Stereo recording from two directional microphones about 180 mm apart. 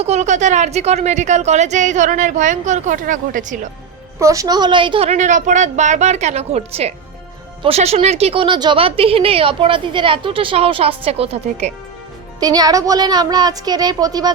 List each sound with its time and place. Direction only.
0.0 s a woman's voice: 40° right (ahead or behind)
4.2 s a woman's voice: 20° right (ahead or behind); by 11.7 s 35° right (ahead or behind)
12.4 s a woman's voice: 20° right (ahead or behind)